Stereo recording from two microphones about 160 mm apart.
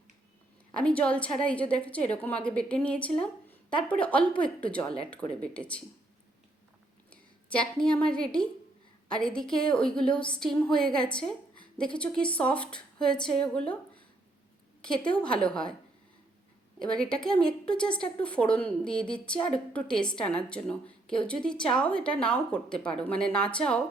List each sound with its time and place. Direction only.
0.7 s a woman's voice: 5° left (ahead or behind)
7.1 s a woman's voice: 5° left (ahead or behind)
14.8 s a woman's voice: 5° left (ahead or behind)
16.8 s a woman's voice: 5° left (ahead or behind)